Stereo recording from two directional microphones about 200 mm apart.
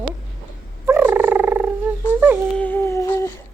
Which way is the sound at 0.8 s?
10° right (ahead or behind).